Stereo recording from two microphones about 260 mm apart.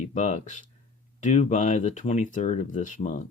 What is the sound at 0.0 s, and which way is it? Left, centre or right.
Speech, left.